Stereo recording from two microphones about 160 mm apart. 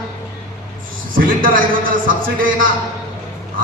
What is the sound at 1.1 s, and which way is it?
A man's voice, 60° right (ahead or behind).